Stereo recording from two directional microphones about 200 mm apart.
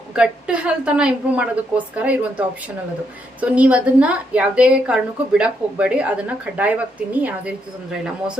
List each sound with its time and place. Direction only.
0.2 s a woman's voice: 5° right (ahead or behind)